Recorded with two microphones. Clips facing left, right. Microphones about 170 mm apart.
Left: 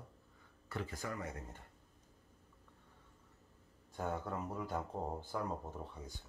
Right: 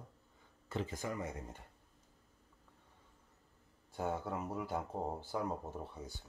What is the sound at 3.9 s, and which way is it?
Speech, 10° right (ahead or behind).